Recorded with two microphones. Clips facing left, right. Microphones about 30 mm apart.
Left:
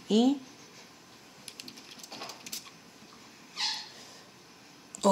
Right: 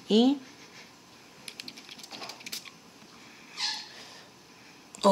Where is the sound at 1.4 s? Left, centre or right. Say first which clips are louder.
Right 4 dB; right.